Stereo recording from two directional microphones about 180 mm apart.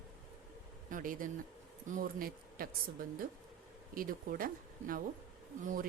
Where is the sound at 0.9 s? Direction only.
50° right (ahead or behind).